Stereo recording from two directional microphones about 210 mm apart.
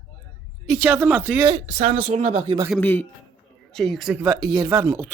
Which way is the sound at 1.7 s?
35° right (ahead or behind).